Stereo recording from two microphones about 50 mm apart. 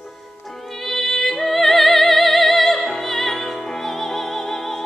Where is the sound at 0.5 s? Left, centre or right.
Centre.